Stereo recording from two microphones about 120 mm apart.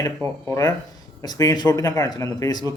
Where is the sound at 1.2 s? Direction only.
30° left (ahead or behind).